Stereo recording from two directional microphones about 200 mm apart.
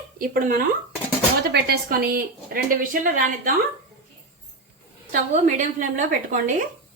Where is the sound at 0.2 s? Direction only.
45° right (ahead or behind).